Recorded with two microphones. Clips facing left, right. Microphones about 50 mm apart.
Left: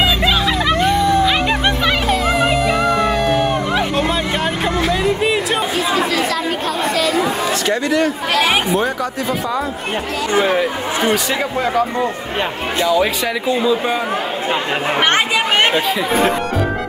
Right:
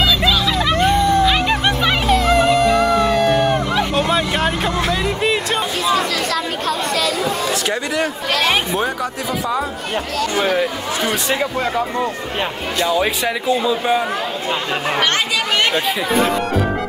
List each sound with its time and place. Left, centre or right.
0.0 s vehicle: left
2.0 s dog: centre
7.6 s speech: centre
8.3 s speech: centre
10.3 s speech: left
14.5 s speech: left